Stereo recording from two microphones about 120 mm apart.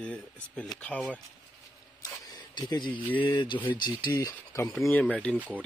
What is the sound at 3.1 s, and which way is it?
Speech, 40° left (ahead or behind).